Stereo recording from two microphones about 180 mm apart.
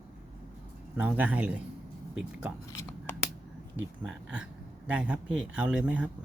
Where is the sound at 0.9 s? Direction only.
10° right (ahead or behind).